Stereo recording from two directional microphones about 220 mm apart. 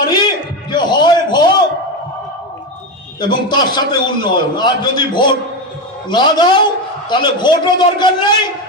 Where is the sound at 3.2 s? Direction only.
20° left (ahead or behind).